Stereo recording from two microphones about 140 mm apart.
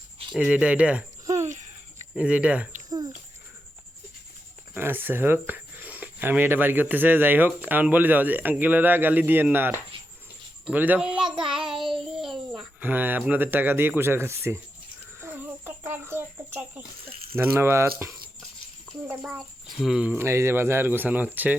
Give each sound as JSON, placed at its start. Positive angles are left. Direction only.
{"t": 0.3, "sound": "speech", "side_deg": -5}
{"t": 2.1, "sound": "speech", "side_deg": -10}
{"t": 4.7, "sound": "a child's voice", "side_deg": -15}
{"t": 11.5, "sound": "child singing", "side_deg": -5}
{"t": 12.9, "sound": "speech", "side_deg": -15}
{"t": 15.2, "sound": "a sound", "side_deg": -15}
{"t": 17.3, "sound": "speech", "side_deg": -15}
{"t": 19.8, "sound": "speech", "side_deg": -5}